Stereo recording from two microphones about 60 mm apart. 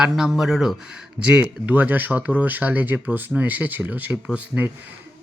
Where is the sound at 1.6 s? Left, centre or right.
Right.